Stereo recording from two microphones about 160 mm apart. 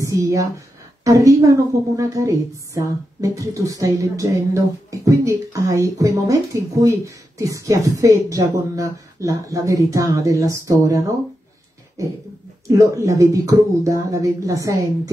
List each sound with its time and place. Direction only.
0.0 s a woman's voice: 20° right (ahead or behind)
12.9 s a woman's voice: 20° right (ahead or behind)